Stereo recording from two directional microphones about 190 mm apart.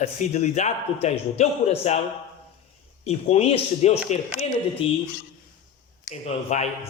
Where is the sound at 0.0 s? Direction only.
35° left (ahead or behind).